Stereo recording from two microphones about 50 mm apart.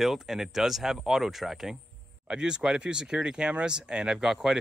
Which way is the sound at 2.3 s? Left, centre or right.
Centre.